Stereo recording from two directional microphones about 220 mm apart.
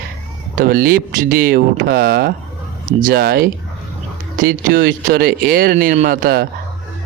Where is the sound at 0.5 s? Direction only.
40° right (ahead or behind).